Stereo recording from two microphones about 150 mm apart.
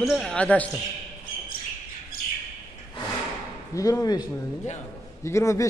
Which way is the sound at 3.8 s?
25° left (ahead or behind).